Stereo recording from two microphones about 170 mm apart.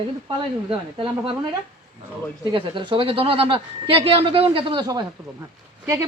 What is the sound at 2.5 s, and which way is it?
A man's voice, 30° right (ahead or behind).